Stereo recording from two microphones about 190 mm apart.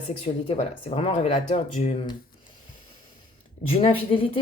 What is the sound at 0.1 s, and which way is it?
Speech, 35° left (ahead or behind).